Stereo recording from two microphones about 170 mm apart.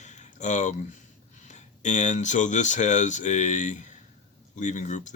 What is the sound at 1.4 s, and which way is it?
Speech, 45° left (ahead or behind).